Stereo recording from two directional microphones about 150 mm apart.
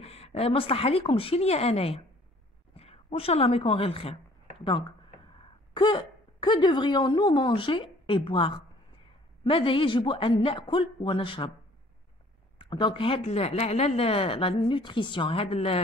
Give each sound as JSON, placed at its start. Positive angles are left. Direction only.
{"t": 0.0, "sound": "a woman's voice", "side_deg": 45}
{"t": 5.8, "sound": "speech", "side_deg": 30}
{"t": 12.5, "sound": "speech", "side_deg": 35}